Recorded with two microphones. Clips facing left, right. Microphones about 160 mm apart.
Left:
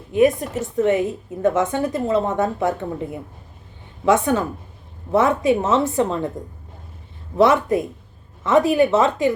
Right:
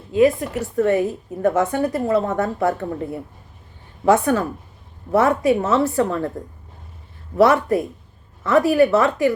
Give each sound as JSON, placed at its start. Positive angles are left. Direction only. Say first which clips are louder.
{"t": 0.1, "sound": "a woman's voice", "louder": "even", "side_deg": 20}
{"t": 7.3, "sound": "a woman's voice", "louder": "right 1 dB", "side_deg": 20}